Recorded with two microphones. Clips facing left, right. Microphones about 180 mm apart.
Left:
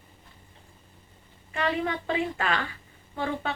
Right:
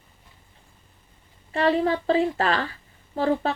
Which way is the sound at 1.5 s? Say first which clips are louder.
Right 7 dB; 35° right (ahead or behind).